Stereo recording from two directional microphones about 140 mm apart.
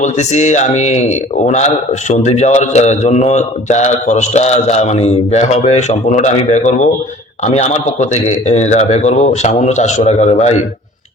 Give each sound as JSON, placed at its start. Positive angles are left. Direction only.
{"t": 0.0, "sound": "speech", "side_deg": 55}
{"t": 2.0, "sound": "a man's voice", "side_deg": 55}